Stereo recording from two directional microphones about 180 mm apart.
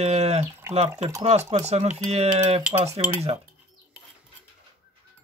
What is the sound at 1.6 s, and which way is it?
Speech, 40° right (ahead or behind).